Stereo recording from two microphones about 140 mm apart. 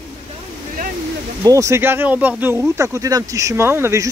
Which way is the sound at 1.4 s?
20° right (ahead or behind).